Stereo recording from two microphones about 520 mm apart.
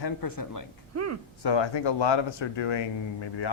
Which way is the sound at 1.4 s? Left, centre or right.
Left.